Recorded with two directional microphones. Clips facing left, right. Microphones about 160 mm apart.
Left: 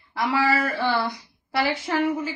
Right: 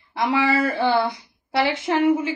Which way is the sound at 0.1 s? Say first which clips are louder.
Right 2 dB; 25° right (ahead or behind).